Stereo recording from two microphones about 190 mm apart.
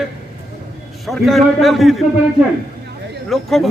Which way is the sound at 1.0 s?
Centre (ahead or behind).